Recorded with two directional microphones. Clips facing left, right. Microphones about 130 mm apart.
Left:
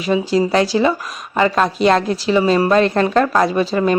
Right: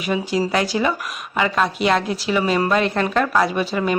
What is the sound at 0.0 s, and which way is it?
Speech, 30° left (ahead or behind).